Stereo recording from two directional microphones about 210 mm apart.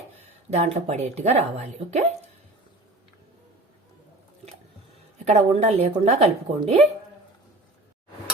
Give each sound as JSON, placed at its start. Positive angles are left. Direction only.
{"t": 0.2, "sound": "speech", "side_deg": -30}
{"t": 5.2, "sound": "a woman's voice", "side_deg": -30}